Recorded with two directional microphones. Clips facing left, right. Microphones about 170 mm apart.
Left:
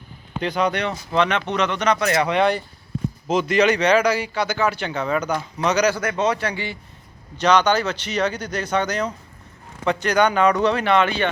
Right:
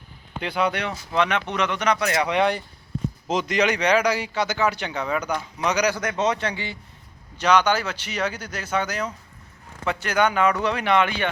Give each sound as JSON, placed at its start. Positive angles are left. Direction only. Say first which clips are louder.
{"t": 0.3, "sound": "a man's voice", "louder": "left 3 dB", "side_deg": -10}
{"t": 7.3, "sound": "speech", "louder": "left 2 dB", "side_deg": -10}